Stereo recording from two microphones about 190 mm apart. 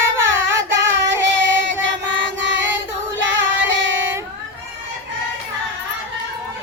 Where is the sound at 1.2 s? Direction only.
75° right (ahead or behind).